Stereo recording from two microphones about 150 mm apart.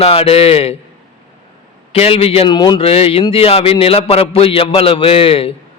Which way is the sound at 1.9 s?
40° left (ahead or behind).